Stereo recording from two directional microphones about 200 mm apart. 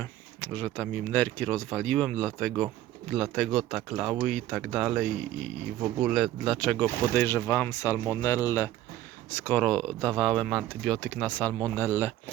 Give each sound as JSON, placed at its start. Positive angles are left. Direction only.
{"t": 0.0, "sound": "speech", "side_deg": 10}